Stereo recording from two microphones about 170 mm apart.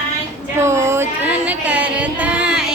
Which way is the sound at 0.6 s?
15° right (ahead or behind).